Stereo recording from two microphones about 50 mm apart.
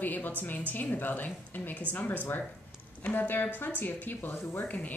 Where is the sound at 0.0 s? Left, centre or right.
Left.